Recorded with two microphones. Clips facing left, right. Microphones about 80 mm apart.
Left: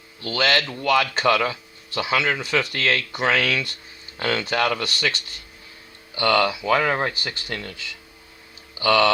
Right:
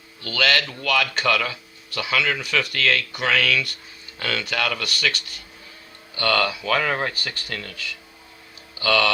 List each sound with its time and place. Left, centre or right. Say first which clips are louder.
0.2 s speech: left 1 dB; left